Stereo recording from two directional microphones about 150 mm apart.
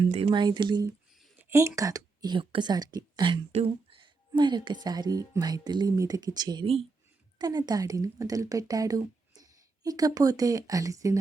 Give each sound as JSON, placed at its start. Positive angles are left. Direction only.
{"t": 0.3, "sound": "speech", "side_deg": -30}
{"t": 1.4, "sound": "speech", "side_deg": -20}